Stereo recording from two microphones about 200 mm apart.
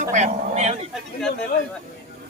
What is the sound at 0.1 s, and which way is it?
Speech, 35° right (ahead or behind).